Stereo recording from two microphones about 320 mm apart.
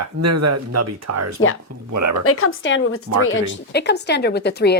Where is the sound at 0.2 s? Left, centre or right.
Right.